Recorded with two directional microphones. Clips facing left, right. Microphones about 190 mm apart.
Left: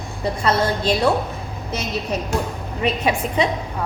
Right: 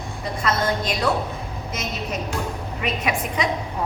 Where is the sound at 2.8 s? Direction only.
30° left (ahead or behind).